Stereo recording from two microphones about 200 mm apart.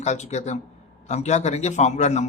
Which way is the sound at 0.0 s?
35° left (ahead or behind).